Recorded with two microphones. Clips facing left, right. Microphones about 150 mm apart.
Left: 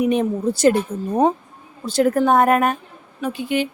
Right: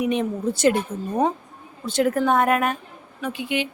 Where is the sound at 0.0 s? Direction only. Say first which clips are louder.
Left 4 dB; 40° left (ahead or behind).